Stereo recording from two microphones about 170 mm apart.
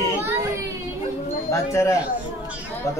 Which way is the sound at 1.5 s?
20° left (ahead or behind).